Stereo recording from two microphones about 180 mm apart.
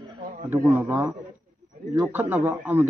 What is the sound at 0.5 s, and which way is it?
A man's voice, 15° right (ahead or behind).